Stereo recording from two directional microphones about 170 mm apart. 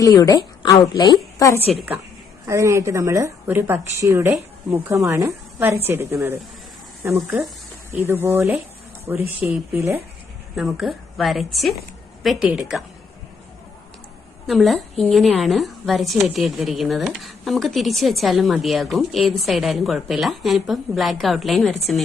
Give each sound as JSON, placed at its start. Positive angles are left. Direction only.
{"t": 0.0, "sound": "a woman's voice", "side_deg": 20}
{"t": 2.5, "sound": "a woman's voice", "side_deg": -15}
{"t": 10.5, "sound": "a woman's voice", "side_deg": 0}
{"t": 14.4, "sound": "a woman's voice", "side_deg": 0}